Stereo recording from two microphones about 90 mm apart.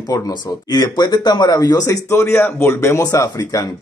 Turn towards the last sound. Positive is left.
turn(degrees=35)  # may be behind; listen again after turning